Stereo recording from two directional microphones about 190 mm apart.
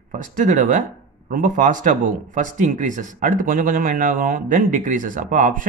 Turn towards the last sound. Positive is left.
turn(degrees=-45)  # may be behind; listen again after turning